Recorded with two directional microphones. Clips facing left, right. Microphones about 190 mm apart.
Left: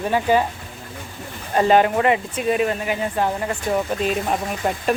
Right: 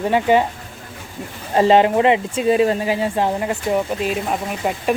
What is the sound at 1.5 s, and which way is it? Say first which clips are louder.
Speech: right 3 dB; 25° right (ahead or behind).